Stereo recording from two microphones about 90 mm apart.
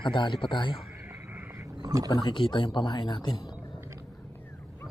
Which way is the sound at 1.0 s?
25° right (ahead or behind).